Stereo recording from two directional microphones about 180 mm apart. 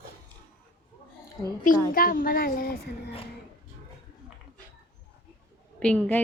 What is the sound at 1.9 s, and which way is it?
Speech, 55° left (ahead or behind).